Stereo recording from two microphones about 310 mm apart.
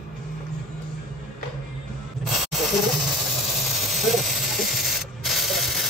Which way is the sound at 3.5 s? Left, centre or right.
Centre.